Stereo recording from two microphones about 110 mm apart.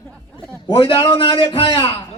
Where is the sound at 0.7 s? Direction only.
50° left (ahead or behind).